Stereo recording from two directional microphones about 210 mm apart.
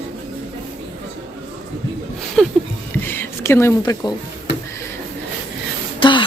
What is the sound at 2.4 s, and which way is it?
Speech, centre (ahead or behind).